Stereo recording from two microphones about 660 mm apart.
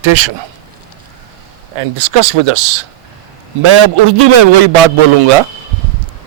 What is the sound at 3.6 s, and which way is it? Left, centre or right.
Speech, right.